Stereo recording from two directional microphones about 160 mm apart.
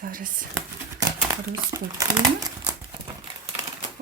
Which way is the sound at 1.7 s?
20° right (ahead or behind).